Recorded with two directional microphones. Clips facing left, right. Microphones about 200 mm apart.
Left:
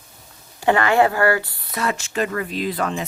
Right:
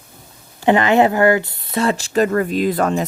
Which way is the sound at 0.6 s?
20° right (ahead or behind).